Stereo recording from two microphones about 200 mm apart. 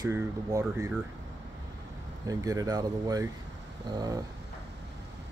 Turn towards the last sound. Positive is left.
turn(degrees=-20)  # may be behind; listen again after turning